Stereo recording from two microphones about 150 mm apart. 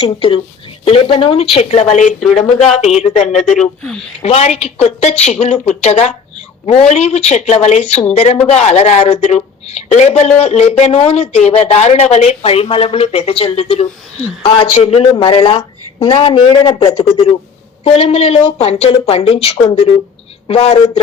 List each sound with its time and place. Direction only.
0.0 s speech: 40° left (ahead or behind)
1.9 s a woman's voice: 55° left (ahead or behind)
2.2 s speech: centre (ahead or behind)
2.8 s a woman's voice: 50° left (ahead or behind)
3.4 s speech: 5° left (ahead or behind)
4.2 s a woman's voice: 45° left (ahead or behind)